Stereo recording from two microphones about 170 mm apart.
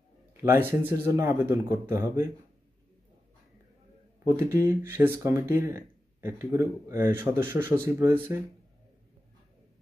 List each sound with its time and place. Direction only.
0.4 s speech: 15° right (ahead or behind)
4.5 s speech: 15° right (ahead or behind)